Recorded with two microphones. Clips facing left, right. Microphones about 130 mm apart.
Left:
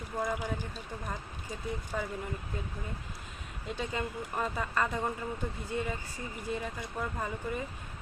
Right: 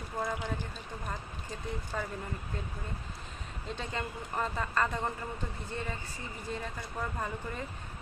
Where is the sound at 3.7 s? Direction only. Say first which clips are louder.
Left 3 dB; 5° left (ahead or behind).